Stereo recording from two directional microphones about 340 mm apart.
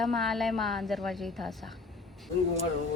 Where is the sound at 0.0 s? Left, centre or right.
Centre.